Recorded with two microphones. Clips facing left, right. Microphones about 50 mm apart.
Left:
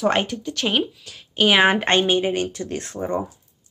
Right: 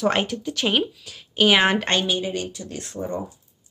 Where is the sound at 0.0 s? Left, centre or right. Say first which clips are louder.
Left 1 dB; centre.